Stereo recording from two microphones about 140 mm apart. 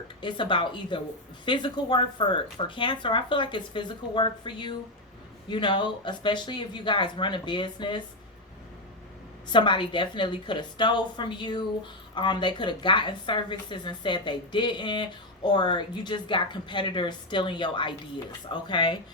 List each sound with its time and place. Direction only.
0.2 s a woman's voice: 35° left (ahead or behind)
9.5 s a woman's voice: 35° left (ahead or behind)